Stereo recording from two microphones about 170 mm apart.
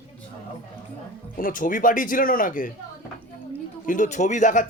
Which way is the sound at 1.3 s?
55° left (ahead or behind).